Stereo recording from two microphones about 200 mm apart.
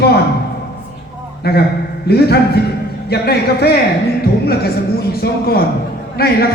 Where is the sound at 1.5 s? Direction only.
55° left (ahead or behind).